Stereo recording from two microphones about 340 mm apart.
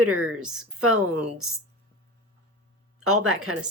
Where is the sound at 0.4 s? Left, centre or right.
Centre.